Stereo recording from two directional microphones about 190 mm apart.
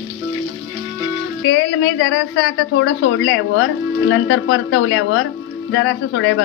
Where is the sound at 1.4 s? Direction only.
75° left (ahead or behind).